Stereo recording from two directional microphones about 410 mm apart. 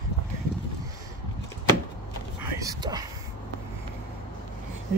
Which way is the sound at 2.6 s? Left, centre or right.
Centre.